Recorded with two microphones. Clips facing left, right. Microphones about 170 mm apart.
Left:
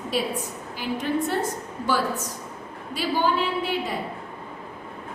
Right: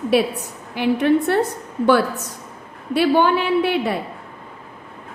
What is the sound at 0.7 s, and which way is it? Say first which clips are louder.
A woman's voice: right 9 dB; 70° right (ahead or behind).